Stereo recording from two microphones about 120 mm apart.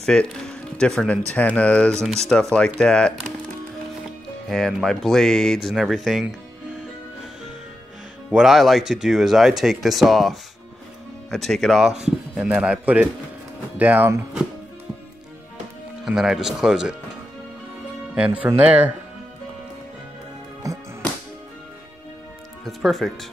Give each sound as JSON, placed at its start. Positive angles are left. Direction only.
{"t": 0.0, "sound": "speech", "side_deg": 5}
{"t": 4.5, "sound": "speech", "side_deg": 5}
{"t": 8.3, "sound": "speech", "side_deg": -5}
{"t": 12.4, "sound": "a man's voice", "side_deg": -10}
{"t": 16.1, "sound": "speech", "side_deg": -5}
{"t": 18.1, "sound": "a man's voice", "side_deg": -10}
{"t": 20.6, "sound": "music", "side_deg": -30}
{"t": 22.7, "sound": "speech", "side_deg": 0}